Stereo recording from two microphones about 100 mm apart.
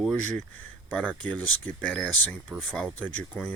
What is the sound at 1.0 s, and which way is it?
Speech, 10° left (ahead or behind).